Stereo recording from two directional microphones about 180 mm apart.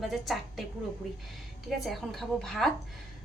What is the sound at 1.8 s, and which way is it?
Speech, centre (ahead or behind).